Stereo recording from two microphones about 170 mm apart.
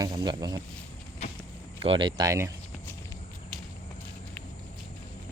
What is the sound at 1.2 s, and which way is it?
Walk, 40° left (ahead or behind).